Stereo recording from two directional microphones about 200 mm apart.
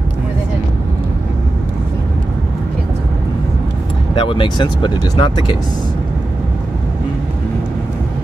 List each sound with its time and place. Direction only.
4.1 s speech: 25° left (ahead or behind)